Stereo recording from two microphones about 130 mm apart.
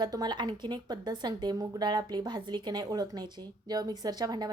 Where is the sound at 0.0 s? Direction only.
30° right (ahead or behind).